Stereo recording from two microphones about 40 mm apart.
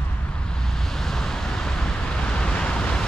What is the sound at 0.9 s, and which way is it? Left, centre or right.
Vehicle, centre.